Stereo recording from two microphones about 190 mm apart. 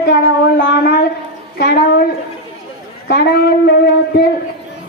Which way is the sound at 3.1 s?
55° left (ahead or behind).